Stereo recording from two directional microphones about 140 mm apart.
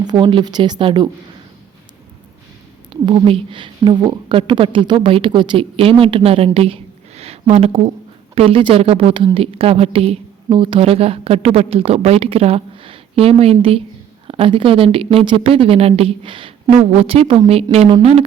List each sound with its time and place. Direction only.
0.0 s a woman's voice: 30° right (ahead or behind)
2.9 s a woman's voice: 40° right (ahead or behind)